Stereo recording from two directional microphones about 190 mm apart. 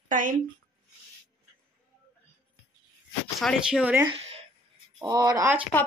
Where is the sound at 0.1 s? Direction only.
45° right (ahead or behind).